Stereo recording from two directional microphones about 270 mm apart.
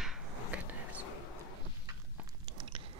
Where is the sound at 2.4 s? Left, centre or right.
Centre.